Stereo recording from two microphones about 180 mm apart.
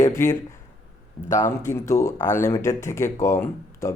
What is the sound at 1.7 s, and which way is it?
Speech, 15° left (ahead or behind).